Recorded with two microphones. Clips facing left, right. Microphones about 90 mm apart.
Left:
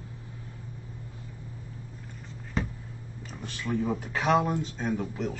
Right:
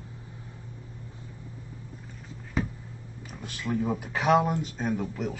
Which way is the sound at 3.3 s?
5° right (ahead or behind).